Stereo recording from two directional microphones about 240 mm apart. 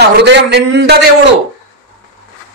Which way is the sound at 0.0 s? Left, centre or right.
Right.